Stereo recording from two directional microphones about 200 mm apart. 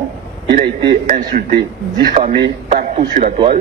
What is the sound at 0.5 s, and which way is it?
A man's voice, 45° right (ahead or behind).